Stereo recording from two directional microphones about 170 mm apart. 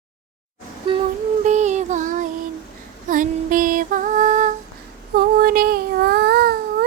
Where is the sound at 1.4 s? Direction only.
45° right (ahead or behind).